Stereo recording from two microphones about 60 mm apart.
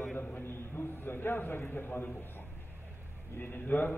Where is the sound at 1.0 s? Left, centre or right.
Left.